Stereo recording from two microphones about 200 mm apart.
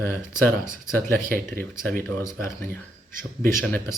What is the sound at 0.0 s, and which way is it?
Speech, 10° left (ahead or behind).